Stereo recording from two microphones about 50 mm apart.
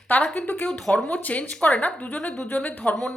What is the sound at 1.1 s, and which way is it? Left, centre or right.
Speech, left.